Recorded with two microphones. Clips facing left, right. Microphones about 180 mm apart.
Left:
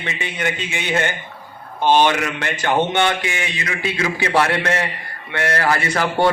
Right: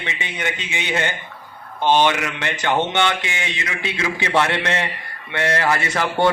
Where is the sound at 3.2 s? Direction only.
20° right (ahead or behind).